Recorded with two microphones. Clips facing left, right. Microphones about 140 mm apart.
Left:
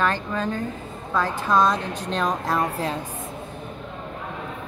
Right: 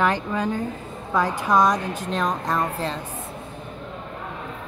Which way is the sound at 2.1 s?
Centre (ahead or behind).